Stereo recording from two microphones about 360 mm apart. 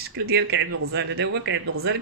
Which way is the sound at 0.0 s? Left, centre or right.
Right.